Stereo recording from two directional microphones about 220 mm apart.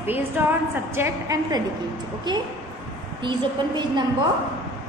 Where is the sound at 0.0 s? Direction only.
10° right (ahead or behind).